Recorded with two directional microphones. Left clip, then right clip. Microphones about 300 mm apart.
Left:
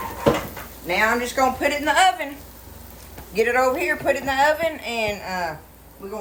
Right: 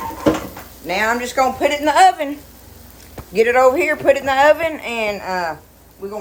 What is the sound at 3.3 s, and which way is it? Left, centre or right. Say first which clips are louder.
Speech: right 6 dB; right.